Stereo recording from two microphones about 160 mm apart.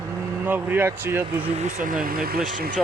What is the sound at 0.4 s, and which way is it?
Speech, 10° right (ahead or behind).